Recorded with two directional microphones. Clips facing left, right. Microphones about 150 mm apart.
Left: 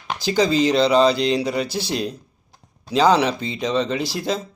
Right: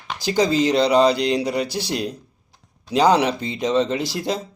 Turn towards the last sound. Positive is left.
turn(degrees=-20)  # may be behind; listen again after turning